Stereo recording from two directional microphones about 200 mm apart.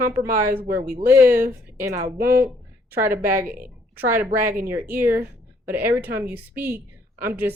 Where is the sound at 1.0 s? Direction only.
10° right (ahead or behind).